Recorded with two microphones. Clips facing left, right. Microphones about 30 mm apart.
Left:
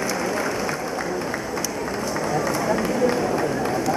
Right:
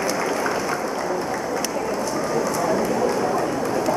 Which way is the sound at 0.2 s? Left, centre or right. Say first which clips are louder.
Right 1 dB; centre.